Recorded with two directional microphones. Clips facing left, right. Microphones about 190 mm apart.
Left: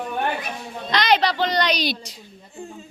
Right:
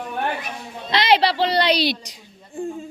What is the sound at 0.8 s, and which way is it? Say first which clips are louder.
A woman's voice: right 2 dB; 25° right (ahead or behind).